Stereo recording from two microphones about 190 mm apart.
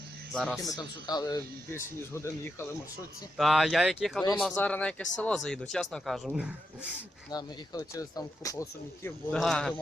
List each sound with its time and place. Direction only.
0.3 s speech: centre (ahead or behind)
0.8 s speech: 20° left (ahead or behind)
3.3 s speech: centre (ahead or behind)
7.3 s speech: 20° left (ahead or behind)
9.0 s speech: 5° left (ahead or behind)